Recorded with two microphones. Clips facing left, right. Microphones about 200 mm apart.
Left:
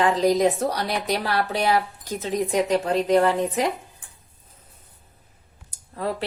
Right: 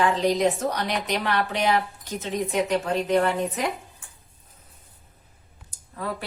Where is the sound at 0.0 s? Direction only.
35° left (ahead or behind).